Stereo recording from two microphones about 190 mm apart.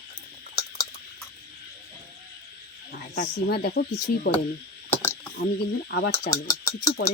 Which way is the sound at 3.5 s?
55° left (ahead or behind).